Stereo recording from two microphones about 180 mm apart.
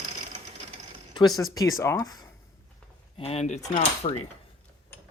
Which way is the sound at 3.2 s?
35° left (ahead or behind).